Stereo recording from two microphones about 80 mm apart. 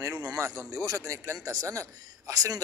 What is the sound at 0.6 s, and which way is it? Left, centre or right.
A man's voice, right.